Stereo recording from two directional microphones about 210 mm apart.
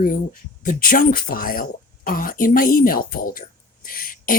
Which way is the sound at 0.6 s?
45° left (ahead or behind).